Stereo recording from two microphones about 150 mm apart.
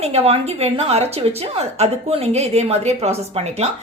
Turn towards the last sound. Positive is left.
turn(degrees=-45)  # may be behind; listen again after turning